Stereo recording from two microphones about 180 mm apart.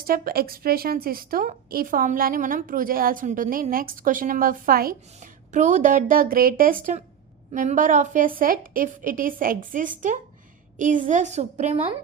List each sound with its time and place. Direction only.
0.1 s a woman's voice: 55° right (ahead or behind); by 11.9 s 35° right (ahead or behind)